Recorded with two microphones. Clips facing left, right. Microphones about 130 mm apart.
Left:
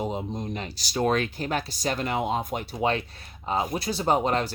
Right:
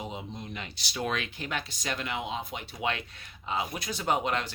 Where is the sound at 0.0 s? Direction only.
40° left (ahead or behind).